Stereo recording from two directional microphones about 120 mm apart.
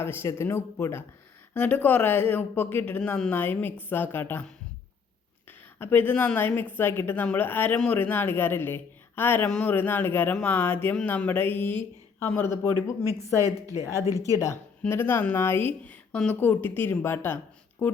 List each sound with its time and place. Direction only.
0.0 s a woman's voice: 20° left (ahead or behind)
5.5 s a woman's voice: 15° left (ahead or behind)
13.1 s speech: 30° right (ahead or behind)
14.3 s a woman's voice: 25° left (ahead or behind)